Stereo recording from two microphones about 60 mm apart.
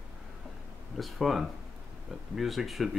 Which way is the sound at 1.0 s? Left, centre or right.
Centre.